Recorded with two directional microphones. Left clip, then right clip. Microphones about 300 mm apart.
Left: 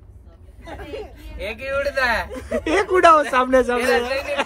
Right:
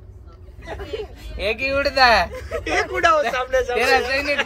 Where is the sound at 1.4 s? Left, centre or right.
Right.